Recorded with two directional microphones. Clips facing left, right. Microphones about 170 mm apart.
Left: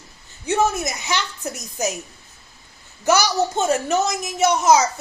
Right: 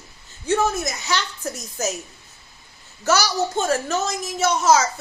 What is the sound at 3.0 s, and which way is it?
A woman's voice, 15° left (ahead or behind).